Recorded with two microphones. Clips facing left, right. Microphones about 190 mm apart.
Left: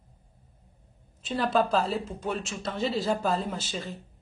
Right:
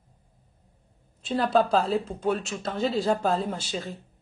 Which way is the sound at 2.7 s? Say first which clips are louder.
Right 3 dB; centre (ahead or behind).